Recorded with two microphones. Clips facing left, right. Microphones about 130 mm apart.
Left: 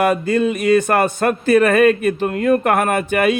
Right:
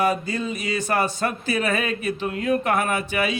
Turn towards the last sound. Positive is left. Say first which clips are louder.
# left 7 dB
turn(degrees=55)  # may be behind; listen again after turning